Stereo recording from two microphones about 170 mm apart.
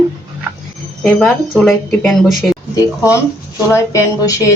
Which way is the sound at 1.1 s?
5° left (ahead or behind).